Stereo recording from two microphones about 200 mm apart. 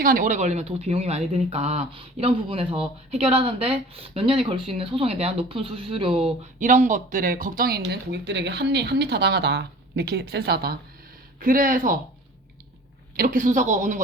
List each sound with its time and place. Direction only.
0.0 s speech: 45° right (ahead or behind); by 6.2 s 25° right (ahead or behind)
6.6 s speech: 40° right (ahead or behind)
13.1 s speech: 40° right (ahead or behind)